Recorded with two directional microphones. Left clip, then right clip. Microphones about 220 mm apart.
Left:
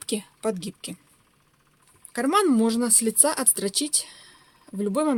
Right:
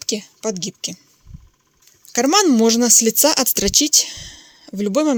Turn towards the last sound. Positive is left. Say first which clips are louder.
# right 6 dB
turn(degrees=-25)  # may be behind; listen again after turning